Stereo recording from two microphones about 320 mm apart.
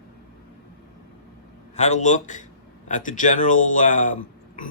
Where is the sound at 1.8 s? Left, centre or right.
Left.